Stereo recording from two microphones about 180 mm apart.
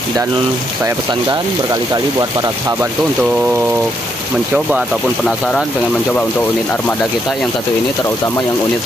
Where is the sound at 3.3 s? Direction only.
10° right (ahead or behind).